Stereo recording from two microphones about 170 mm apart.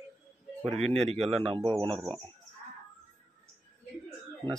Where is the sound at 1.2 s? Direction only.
35° right (ahead or behind).